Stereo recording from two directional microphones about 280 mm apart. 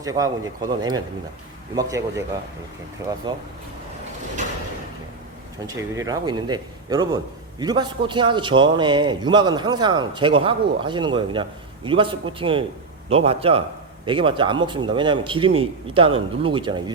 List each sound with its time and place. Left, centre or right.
0.0 s a man's voice: centre
5.6 s a man's voice: centre